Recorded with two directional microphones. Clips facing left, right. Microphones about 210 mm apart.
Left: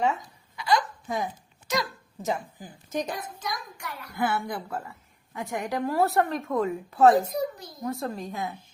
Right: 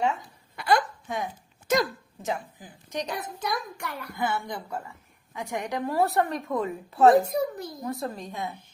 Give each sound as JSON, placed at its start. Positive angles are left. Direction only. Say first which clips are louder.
{"t": 0.5, "sound": "a sound", "louder": "right 1 dB", "side_deg": -60}
{"t": 1.0, "sound": "speech", "louder": "left 2 dB", "side_deg": 0}
{"t": 1.6, "sound": "speech", "louder": "right 5 dB", "side_deg": -50}
{"t": 2.2, "sound": "a woman's voice", "louder": "left 2 dB", "side_deg": 0}
{"t": 3.4, "sound": "a child's voice", "louder": "right 4 dB", "side_deg": -60}
{"t": 4.2, "sound": "a woman's voice", "louder": "left 2 dB", "side_deg": 5}
{"t": 7.3, "sound": "a child's voice", "louder": "right 2 dB", "side_deg": -60}
{"t": 7.8, "sound": "a woman's voice", "louder": "left 3 dB", "side_deg": 0}